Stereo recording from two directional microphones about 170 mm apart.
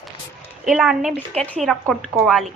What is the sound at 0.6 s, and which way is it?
Speech, 5° right (ahead or behind).